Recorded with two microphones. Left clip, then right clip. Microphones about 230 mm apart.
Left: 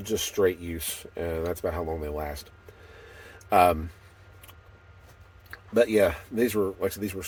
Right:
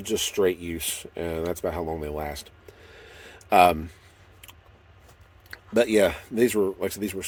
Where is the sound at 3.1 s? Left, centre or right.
Right.